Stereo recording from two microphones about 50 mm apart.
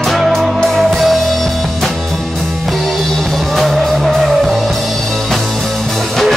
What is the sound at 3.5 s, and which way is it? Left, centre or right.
Music, centre.